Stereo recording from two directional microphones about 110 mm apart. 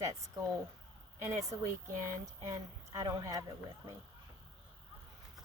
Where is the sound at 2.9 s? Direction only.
35° right (ahead or behind).